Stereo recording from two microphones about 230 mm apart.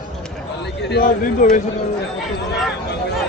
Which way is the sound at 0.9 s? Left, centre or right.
Left.